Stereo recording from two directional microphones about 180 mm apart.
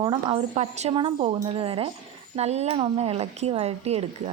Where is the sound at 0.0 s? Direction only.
30° right (ahead or behind).